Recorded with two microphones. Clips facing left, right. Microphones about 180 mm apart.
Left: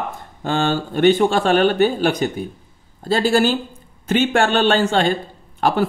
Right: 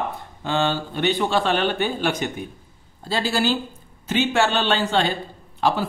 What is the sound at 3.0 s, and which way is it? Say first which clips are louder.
Speech: left 6 dB; 50° left (ahead or behind).